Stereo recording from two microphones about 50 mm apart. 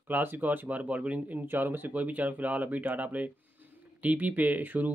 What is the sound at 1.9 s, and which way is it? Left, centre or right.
Speech, right.